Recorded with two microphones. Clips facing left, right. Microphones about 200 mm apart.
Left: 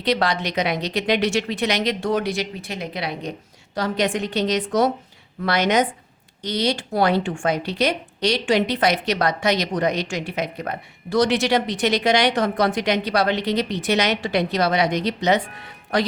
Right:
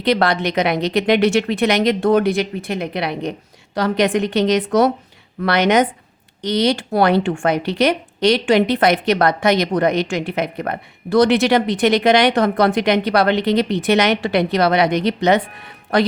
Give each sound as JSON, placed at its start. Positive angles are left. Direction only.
{"t": 0.0, "sound": "speech", "side_deg": -60}